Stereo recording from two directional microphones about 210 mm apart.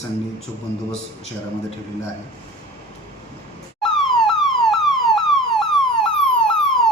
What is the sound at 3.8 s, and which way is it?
Emergency vehicle, centre (ahead or behind).